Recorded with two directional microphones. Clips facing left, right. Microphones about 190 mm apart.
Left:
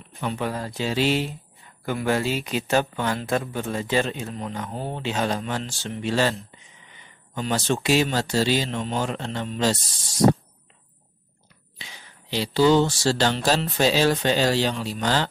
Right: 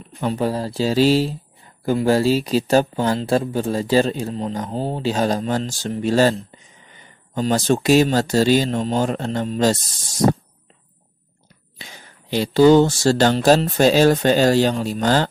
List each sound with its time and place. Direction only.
0.2 s speech: 35° right (ahead or behind)
11.8 s speech: 45° right (ahead or behind)